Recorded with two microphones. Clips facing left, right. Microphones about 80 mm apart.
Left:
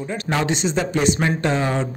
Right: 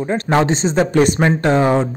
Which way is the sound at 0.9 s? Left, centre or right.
Right.